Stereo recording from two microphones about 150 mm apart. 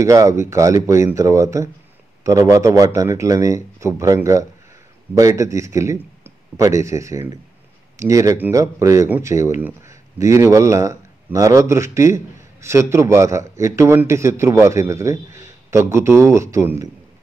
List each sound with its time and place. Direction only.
0.0 s a man's voice: 20° right (ahead or behind)